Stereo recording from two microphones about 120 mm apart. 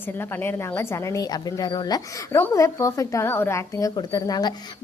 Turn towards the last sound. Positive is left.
turn(degrees=35)  # may be behind; listen again after turning